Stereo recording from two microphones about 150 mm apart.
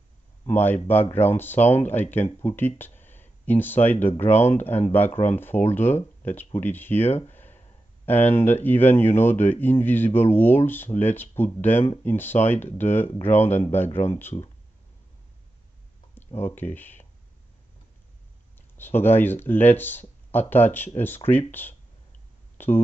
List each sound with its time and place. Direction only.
0.5 s speech: 15° left (ahead or behind)
16.3 s speech: 15° left (ahead or behind)
18.8 s speech: 15° left (ahead or behind)